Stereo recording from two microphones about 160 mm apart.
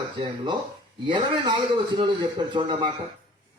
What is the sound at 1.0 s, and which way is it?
A man's voice, 30° right (ahead or behind).